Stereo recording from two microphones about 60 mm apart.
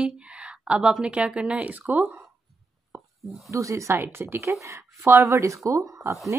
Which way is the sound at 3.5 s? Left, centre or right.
Right.